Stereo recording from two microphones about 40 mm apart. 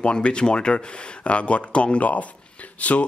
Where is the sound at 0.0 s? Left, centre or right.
Left.